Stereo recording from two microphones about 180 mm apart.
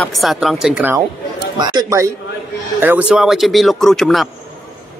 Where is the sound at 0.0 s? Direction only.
Centre (ahead or behind).